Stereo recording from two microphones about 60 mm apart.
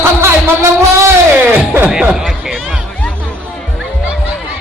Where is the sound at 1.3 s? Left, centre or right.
Right.